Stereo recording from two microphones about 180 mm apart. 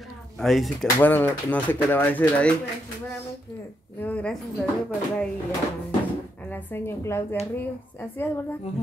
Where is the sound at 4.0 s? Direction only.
5° left (ahead or behind).